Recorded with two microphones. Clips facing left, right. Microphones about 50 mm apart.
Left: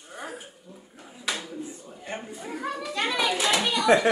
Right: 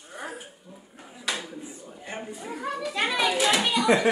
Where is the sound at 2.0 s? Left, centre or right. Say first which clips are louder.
Even; centre.